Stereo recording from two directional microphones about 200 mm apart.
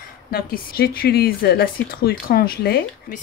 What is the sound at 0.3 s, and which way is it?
A woman's voice, 50° left (ahead or behind).